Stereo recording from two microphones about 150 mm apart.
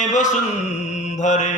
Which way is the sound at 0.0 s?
55° left (ahead or behind).